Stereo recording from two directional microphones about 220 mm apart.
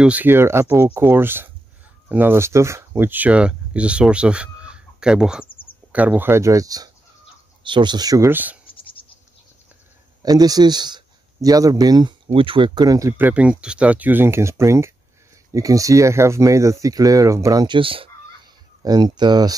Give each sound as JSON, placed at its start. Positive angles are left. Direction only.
{"t": 0.0, "sound": "speech", "side_deg": -5}
{"t": 8.7, "sound": "insect", "side_deg": 25}
{"t": 10.2, "sound": "speech", "side_deg": -15}